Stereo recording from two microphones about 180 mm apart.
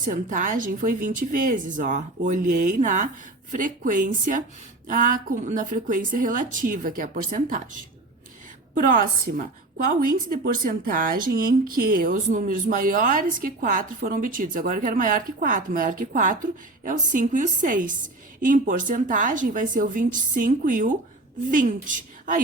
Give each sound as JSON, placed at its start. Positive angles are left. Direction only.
{"t": 0.0, "sound": "speech", "side_deg": -45}